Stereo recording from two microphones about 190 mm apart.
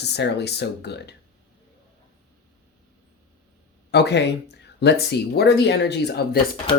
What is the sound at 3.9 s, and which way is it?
Speech, 60° left (ahead or behind).